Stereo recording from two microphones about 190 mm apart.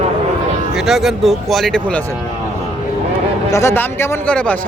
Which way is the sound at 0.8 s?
Centre (ahead or behind).